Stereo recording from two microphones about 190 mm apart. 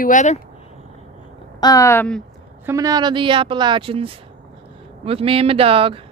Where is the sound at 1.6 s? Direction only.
15° left (ahead or behind).